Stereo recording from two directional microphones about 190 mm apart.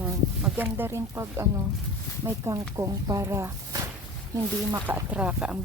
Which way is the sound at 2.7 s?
15° right (ahead or behind).